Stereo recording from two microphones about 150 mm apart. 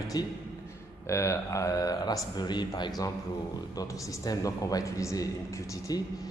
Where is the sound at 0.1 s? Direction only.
25° left (ahead or behind).